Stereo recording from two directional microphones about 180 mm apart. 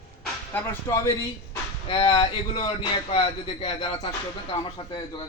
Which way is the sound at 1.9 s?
30° left (ahead or behind).